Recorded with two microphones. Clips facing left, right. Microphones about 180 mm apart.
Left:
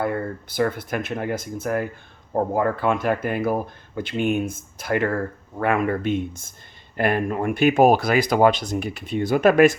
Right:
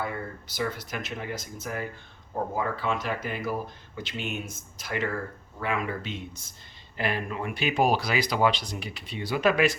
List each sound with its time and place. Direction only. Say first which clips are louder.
0.0 s speech: left 8 dB; 55° left (ahead or behind)